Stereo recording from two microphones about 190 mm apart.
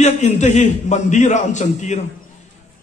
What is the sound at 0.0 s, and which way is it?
A man's voice, 40° left (ahead or behind).